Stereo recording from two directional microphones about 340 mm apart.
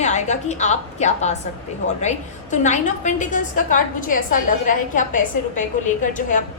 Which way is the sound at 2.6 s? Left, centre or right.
Left.